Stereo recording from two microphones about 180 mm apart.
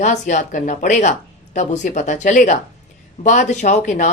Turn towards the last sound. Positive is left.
turn(degrees=40)  # may be behind; listen again after turning